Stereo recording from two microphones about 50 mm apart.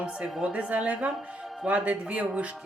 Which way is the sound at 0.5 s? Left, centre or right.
Right.